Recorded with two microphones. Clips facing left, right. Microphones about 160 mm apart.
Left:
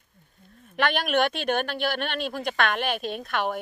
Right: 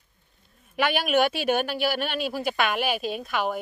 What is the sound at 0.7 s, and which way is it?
Speech, 5° right (ahead or behind).